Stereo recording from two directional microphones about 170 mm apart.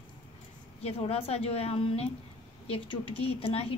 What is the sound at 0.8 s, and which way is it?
A woman's voice, 35° left (ahead or behind).